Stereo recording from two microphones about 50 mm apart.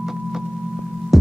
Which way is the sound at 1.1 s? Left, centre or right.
Centre.